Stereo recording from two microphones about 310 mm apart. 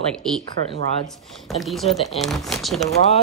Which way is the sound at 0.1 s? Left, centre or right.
Centre.